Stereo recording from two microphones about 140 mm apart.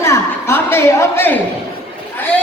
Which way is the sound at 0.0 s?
20° left (ahead or behind).